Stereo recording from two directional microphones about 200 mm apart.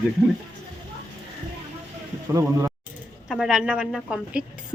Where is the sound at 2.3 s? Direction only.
15° right (ahead or behind).